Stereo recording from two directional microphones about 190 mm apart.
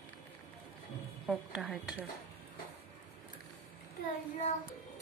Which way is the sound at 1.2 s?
Centre (ahead or behind).